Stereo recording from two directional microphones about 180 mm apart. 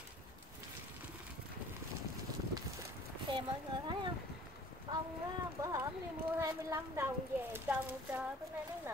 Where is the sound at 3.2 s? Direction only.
25° right (ahead or behind).